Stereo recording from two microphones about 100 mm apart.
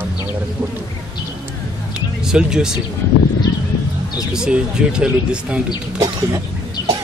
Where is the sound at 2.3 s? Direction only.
5° right (ahead or behind).